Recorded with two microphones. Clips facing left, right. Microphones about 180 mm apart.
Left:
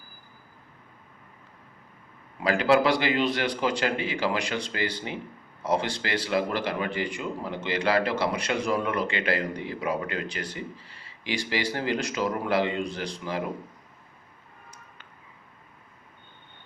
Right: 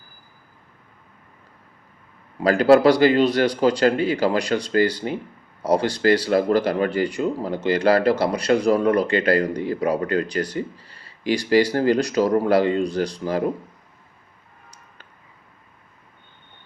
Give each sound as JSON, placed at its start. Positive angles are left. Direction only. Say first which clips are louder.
{"t": 2.4, "sound": "speech", "louder": "right 7 dB", "side_deg": -40}